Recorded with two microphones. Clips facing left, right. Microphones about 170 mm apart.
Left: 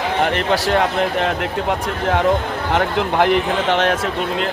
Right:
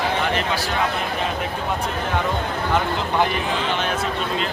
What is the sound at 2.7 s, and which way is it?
Speech, 75° left (ahead or behind).